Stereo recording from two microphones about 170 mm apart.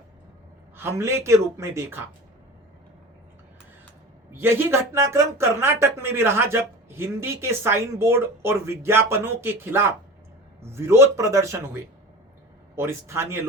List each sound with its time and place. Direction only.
0.8 s speech: 15° right (ahead or behind)
4.3 s speech: 15° right (ahead or behind)